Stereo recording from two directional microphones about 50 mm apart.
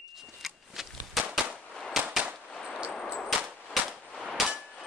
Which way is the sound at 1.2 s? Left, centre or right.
Centre.